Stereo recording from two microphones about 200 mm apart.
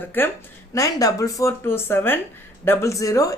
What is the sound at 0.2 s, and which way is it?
Speech, 10° left (ahead or behind).